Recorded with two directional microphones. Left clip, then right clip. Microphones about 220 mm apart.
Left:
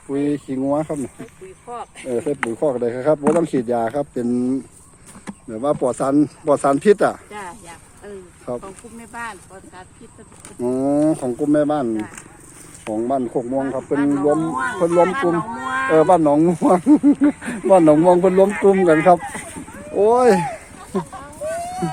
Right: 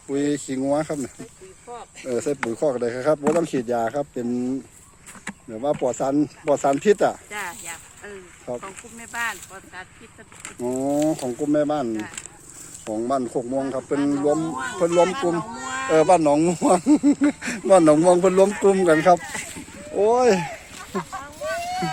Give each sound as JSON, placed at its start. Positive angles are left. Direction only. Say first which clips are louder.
{"t": 0.1, "sound": "speech", "louder": "left 2 dB", "side_deg": -15}
{"t": 1.7, "sound": "speech", "louder": "left 6 dB", "side_deg": 0}
{"t": 2.0, "sound": "speech", "louder": "left 2 dB", "side_deg": -15}
{"t": 20.9, "sound": "speech", "louder": "left 3 dB", "side_deg": 5}